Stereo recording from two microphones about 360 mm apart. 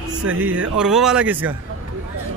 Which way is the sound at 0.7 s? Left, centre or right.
Centre.